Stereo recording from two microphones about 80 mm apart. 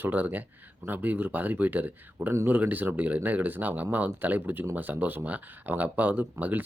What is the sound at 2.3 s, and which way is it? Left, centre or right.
Speech, right.